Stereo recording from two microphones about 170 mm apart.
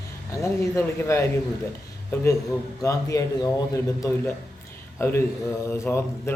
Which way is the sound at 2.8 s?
20° left (ahead or behind).